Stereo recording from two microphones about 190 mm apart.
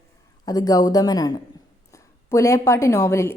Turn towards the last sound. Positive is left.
turn(degrees=15)  # may be behind; listen again after turning